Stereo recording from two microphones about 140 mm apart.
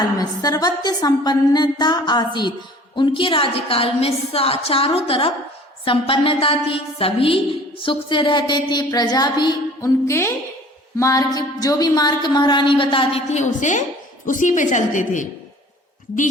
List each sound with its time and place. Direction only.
0.2 s a woman's voice: 25° left (ahead or behind)
10.1 s a woman's voice: 20° left (ahead or behind); by 13.2 s 40° left (ahead or behind)
13.3 s a woman's voice: 60° left (ahead or behind)